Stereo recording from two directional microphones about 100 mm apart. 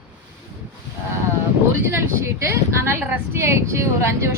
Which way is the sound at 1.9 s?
25° right (ahead or behind).